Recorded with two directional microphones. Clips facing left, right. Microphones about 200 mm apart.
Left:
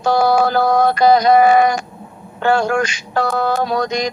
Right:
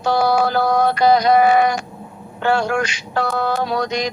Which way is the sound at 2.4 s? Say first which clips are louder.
Left 3 dB; 45° left (ahead or behind).